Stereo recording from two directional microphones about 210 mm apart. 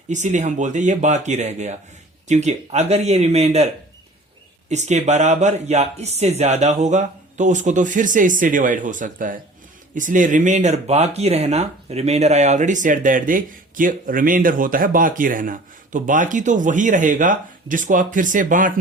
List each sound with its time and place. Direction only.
0.1 s speech: 35° right (ahead or behind)
4.7 s speech: 35° right (ahead or behind)